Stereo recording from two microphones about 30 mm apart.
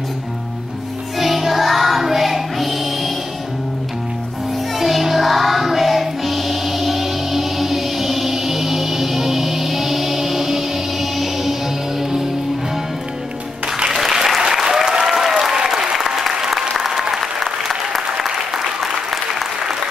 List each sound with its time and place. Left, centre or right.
1.2 s music: centre
4.7 s music: centre
13.9 s applause: centre
18.1 s applause: right